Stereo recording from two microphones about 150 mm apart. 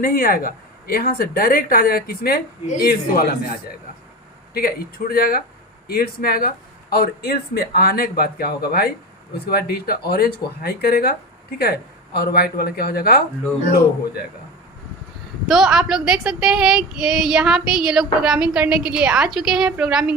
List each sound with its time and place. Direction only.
0.0 s a woman's voice: 80° left
2.8 s speech: 80° left
4.5 s speech: 90° left
12.1 s speech: 90° left
15.4 s speech: 5° right (ahead or behind)